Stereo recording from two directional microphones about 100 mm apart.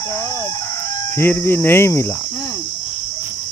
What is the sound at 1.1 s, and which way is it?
Cricket, 20° left (ahead or behind).